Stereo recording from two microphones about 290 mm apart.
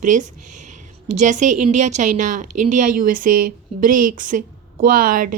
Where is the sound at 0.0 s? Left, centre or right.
Right.